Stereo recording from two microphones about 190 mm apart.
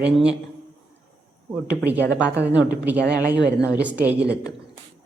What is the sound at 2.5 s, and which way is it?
Speech, 10° right (ahead or behind).